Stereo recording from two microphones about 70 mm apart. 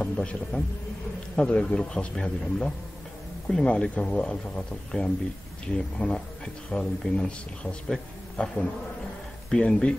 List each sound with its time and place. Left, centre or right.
0.0 s a man's voice: centre